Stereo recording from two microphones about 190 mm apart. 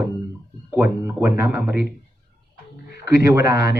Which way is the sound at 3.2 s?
15° right (ahead or behind).